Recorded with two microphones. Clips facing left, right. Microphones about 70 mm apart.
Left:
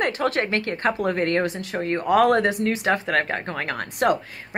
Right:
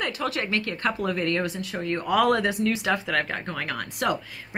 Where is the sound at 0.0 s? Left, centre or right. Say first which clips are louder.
Left 5 dB; left.